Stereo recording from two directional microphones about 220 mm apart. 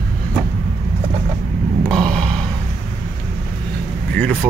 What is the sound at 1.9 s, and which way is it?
Burping, centre (ahead or behind).